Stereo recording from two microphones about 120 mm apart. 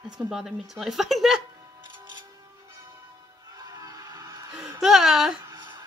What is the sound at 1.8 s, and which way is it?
Music, 40° right (ahead or behind).